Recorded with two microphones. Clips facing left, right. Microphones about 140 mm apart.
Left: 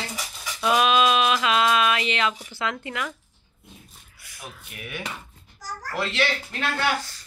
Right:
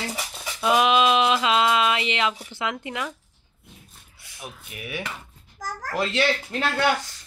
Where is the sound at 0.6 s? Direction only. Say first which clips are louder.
Right 1 dB; 20° right (ahead or behind).